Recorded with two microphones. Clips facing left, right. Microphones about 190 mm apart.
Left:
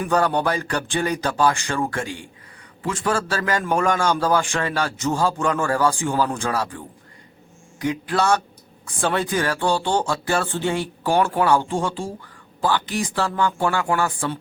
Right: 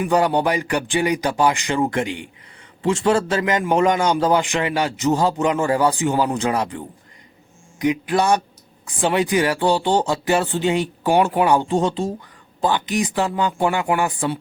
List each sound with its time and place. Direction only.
0.0 s a man's voice: 15° right (ahead or behind)